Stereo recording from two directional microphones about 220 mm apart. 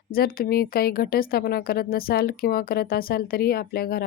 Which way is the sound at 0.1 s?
40° left (ahead or behind).